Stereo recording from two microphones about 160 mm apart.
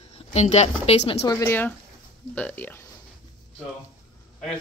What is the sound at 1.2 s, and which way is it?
A woman's voice, 20° left (ahead or behind).